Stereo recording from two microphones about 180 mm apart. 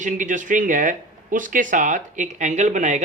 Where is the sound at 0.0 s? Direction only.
45° right (ahead or behind).